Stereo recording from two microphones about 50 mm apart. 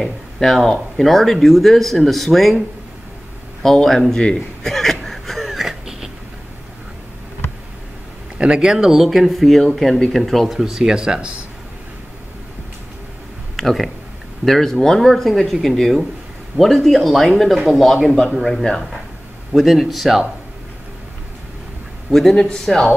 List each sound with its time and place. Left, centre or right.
0.0 s speech: centre
3.6 s a man's voice: centre
4.2 s chuckle: centre
8.4 s speech: right
8.6 s speech: centre
13.6 s a man's voice: centre
19.5 s speech: centre
22.1 s a man's voice: centre